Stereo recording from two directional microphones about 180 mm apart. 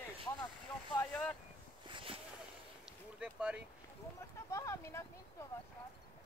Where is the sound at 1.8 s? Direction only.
30° right (ahead or behind).